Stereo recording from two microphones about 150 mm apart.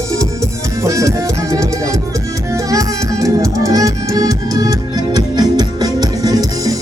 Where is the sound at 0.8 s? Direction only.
20° right (ahead or behind).